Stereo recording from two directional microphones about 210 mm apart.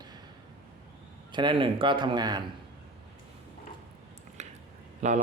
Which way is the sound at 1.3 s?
25° right (ahead or behind).